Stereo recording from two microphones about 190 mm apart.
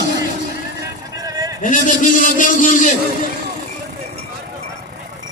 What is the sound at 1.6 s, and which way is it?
A man's voice, 40° left (ahead or behind).